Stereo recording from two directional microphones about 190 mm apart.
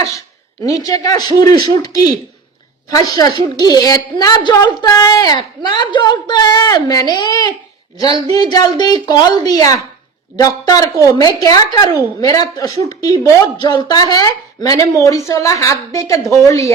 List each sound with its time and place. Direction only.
0.0 s a sound: 15° left (ahead or behind)
1.4 s a woman's voice: 20° left (ahead or behind)
2.9 s a woman's voice: 20° left (ahead or behind)
11.0 s a woman's voice: 20° left (ahead or behind)